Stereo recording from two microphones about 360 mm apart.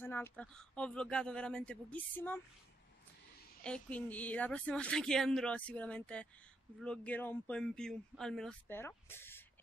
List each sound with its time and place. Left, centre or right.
0.0 s a woman's voice: centre
3.6 s a woman's voice: centre